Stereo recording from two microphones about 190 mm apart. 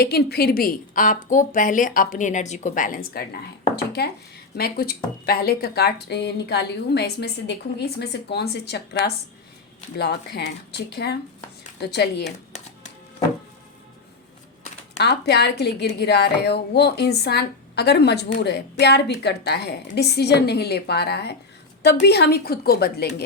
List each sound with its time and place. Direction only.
0.0 s a woman's voice: 55° left (ahead or behind)
3.8 s a sound: 60° left (ahead or behind)
4.5 s a woman's voice: 55° left (ahead or behind)
12.5 s music: 35° left (ahead or behind)
14.9 s a woman's voice: 60° left (ahead or behind)